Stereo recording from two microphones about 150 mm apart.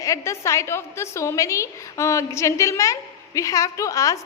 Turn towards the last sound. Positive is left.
turn(degrees=20)  # may be behind; listen again after turning